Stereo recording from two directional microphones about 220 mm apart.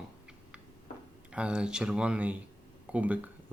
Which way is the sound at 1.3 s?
5° right (ahead or behind).